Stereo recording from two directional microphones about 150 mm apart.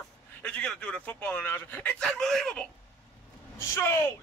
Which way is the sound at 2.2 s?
5° left (ahead or behind).